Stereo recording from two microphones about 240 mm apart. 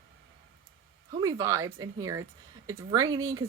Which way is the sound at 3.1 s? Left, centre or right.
Right.